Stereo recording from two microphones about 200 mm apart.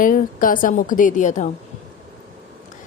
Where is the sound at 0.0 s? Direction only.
40° left (ahead or behind).